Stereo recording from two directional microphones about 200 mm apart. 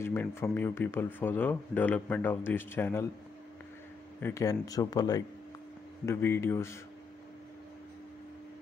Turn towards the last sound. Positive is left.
turn(degrees=15)  # may be behind; listen again after turning